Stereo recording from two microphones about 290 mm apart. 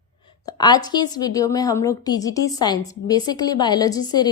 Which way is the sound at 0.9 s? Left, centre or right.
Centre.